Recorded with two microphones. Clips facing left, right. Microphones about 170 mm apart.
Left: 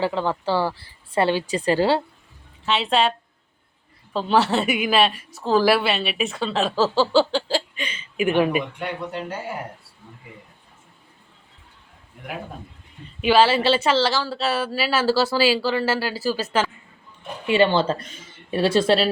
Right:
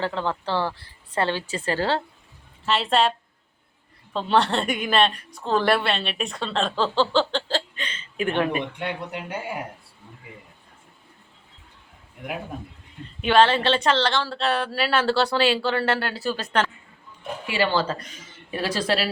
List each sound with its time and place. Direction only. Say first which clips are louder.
0.0 s a woman's voice: left 4 dB; 10° left (ahead or behind)
2.6 s a woman's voice: left 1 dB; centre (ahead or behind)
13.2 s a woman's voice: left 1 dB; 5° left (ahead or behind)
17.5 s speech: left 5 dB; 25° left (ahead or behind)